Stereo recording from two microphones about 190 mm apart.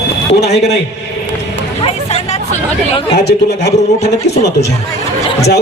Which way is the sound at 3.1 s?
60° left (ahead or behind).